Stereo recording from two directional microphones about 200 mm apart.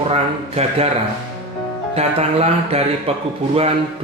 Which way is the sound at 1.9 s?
30° right (ahead or behind).